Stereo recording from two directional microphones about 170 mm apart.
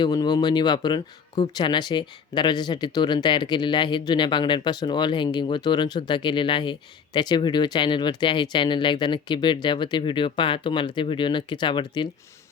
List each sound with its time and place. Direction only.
0.0 s speech: 25° left (ahead or behind)